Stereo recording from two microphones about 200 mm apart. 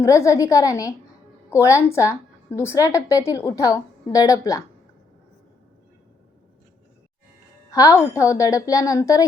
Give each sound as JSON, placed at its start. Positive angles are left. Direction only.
{"t": 0.0, "sound": "a woman's voice", "side_deg": 15}
{"t": 7.7, "sound": "a woman's voice", "side_deg": 15}